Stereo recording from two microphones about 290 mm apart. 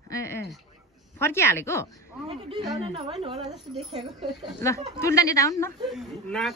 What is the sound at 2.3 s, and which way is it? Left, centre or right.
A woman's voice, centre.